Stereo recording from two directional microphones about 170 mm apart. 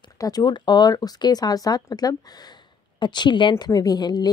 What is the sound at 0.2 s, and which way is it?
A woman's voice, 20° left (ahead or behind).